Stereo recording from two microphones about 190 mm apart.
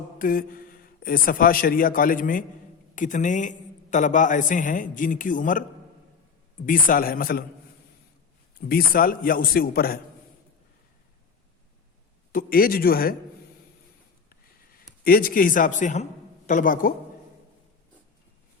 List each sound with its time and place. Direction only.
0.2 s a man's voice: 50° left (ahead or behind)
6.7 s a man's voice: 45° left (ahead or behind)
8.7 s a man's voice: 50° left (ahead or behind)
12.3 s a man's voice: 50° left (ahead or behind)
15.0 s a man's voice: 50° left (ahead or behind)